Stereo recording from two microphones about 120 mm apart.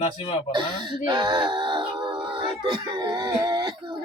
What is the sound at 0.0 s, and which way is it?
Speech, 55° left (ahead or behind).